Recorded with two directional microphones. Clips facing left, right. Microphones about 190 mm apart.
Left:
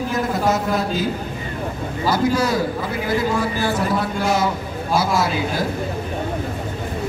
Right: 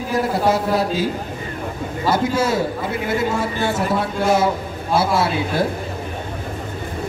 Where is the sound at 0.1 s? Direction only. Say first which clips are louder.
Right 4 dB; 30° right (ahead or behind).